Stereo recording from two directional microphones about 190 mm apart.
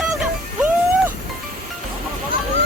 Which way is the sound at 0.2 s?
10° right (ahead or behind).